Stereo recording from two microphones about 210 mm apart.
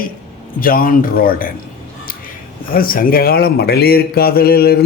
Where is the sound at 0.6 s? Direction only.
40° left (ahead or behind).